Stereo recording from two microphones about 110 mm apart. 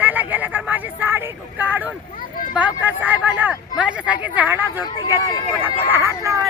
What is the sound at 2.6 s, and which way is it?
Speech, 15° right (ahead or behind).